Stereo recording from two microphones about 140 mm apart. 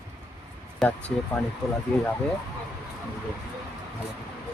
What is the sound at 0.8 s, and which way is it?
Speech, 10° left (ahead or behind).